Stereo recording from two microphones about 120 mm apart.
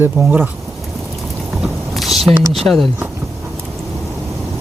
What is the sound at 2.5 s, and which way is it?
Speech, centre (ahead or behind).